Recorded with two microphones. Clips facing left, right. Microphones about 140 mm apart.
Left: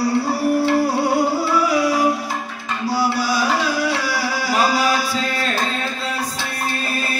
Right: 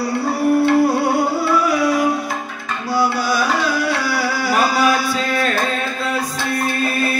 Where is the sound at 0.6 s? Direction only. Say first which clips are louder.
Right 3 dB; 55° right (ahead or behind).